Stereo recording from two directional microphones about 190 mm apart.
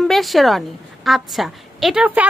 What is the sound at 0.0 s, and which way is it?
A woman's voice, centre (ahead or behind).